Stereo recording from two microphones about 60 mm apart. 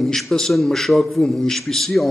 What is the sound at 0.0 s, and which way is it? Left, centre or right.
A man's voice, centre.